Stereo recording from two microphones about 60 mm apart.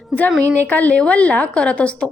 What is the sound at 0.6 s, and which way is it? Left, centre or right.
A woman's voice, left.